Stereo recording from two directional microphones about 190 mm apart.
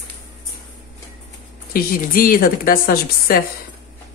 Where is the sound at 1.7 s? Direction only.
50° left (ahead or behind).